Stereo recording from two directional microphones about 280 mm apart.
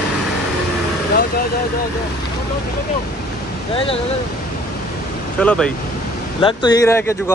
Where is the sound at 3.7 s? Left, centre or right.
Centre.